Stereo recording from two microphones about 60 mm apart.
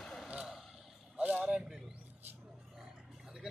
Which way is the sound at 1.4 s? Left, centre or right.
Centre.